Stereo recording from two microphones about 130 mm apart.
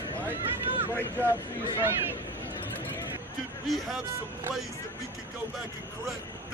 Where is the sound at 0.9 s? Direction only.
20° left (ahead or behind).